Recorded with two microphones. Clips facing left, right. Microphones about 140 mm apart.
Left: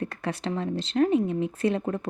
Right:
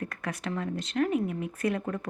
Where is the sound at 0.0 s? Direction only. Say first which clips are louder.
Left 4 dB; 30° left (ahead or behind).